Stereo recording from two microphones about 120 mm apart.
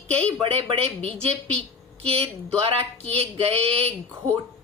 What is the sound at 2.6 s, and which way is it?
A woman's voice, 50° right (ahead or behind).